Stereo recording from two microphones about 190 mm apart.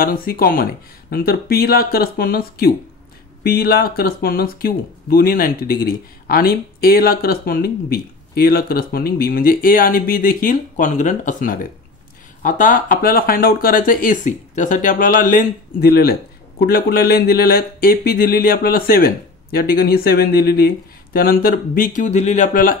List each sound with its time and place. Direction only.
0.0 s speech: 50° left (ahead or behind)